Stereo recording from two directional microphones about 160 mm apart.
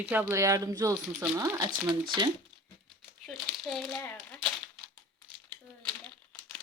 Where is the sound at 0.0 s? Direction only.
10° right (ahead or behind).